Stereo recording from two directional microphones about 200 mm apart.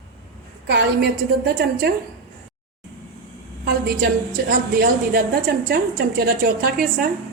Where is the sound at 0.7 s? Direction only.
55° right (ahead or behind).